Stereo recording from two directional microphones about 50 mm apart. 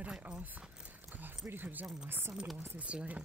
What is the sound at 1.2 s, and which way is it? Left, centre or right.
Speech, right.